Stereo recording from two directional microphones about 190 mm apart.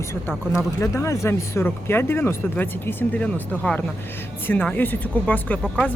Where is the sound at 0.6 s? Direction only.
15° left (ahead or behind).